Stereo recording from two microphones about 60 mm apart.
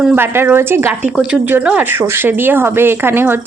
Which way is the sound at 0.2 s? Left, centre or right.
Right.